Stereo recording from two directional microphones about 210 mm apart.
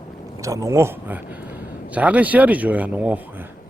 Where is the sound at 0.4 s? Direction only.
15° right (ahead or behind).